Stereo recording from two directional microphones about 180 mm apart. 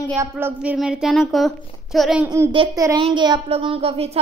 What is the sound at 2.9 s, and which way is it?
A woman's voice, 25° right (ahead or behind).